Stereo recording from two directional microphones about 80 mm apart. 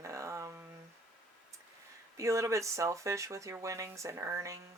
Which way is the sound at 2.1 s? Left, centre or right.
Right.